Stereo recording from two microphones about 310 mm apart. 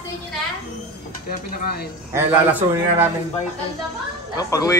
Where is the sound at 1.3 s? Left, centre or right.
Left.